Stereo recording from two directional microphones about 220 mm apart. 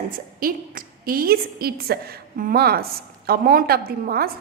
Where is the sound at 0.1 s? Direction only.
40° right (ahead or behind).